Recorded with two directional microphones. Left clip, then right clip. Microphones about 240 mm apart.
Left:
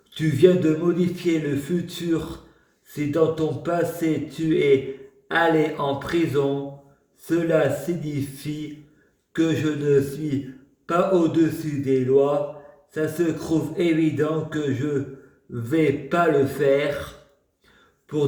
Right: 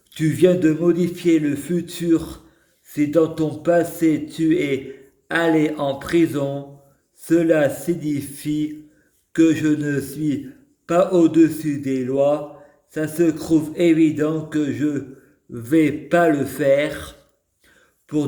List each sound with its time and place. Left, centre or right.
0.1 s a man's voice: right